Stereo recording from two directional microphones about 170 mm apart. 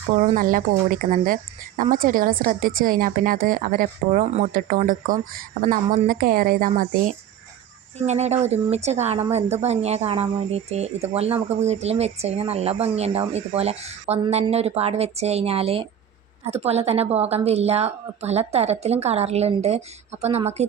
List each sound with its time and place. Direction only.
0.2 s speech: 50° right (ahead or behind)
7.9 s speech: 40° right (ahead or behind)